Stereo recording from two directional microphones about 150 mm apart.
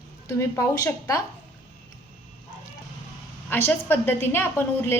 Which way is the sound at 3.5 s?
15° left (ahead or behind).